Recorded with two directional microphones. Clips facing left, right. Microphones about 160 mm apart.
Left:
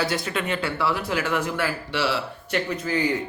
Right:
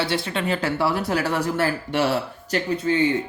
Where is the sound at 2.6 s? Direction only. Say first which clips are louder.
Right 6 dB; 30° right (ahead or behind).